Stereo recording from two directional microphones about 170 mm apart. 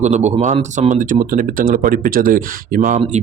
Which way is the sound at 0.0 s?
40° right (ahead or behind).